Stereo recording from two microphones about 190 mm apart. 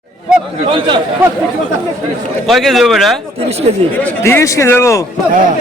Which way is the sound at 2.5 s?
Centre (ahead or behind).